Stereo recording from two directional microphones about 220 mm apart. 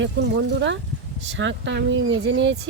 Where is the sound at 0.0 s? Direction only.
55° right (ahead or behind).